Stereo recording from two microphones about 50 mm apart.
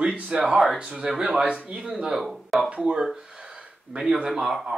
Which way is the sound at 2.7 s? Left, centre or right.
Centre.